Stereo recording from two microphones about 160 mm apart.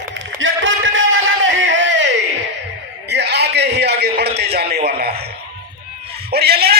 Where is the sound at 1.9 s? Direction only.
90° right.